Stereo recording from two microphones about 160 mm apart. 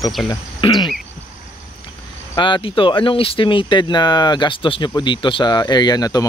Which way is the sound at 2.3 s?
30° left (ahead or behind).